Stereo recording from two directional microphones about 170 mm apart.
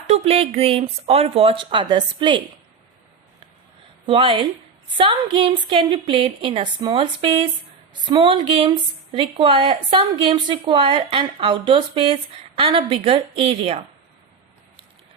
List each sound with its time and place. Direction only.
0.1 s a woman's voice: 35° right (ahead or behind)
4.0 s a woman's voice: 30° right (ahead or behind)